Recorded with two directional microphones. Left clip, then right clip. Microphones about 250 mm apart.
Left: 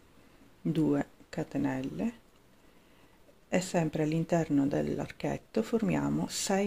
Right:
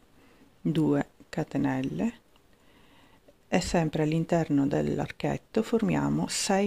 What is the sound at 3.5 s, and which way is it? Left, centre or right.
Speech, centre.